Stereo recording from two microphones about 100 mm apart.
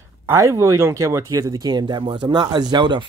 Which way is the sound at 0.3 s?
30° right (ahead or behind).